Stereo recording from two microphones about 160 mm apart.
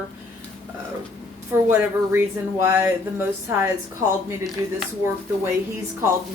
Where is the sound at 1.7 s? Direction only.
15° right (ahead or behind).